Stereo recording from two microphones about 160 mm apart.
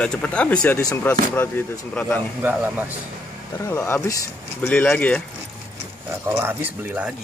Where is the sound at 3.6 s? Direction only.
20° left (ahead or behind).